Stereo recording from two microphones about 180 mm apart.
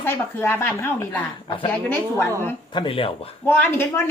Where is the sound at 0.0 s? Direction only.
10° left (ahead or behind).